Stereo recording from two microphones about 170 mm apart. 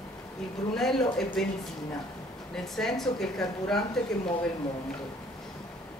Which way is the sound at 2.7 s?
Centre (ahead or behind).